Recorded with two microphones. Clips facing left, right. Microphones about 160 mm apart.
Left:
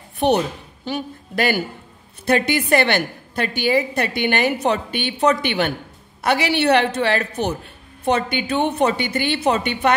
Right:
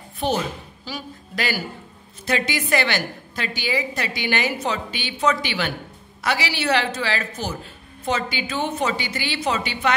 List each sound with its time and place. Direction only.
0.2 s a woman's voice: 65° left (ahead or behind)